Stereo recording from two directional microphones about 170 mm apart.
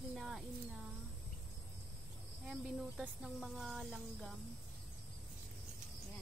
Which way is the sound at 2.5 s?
Centre (ahead or behind).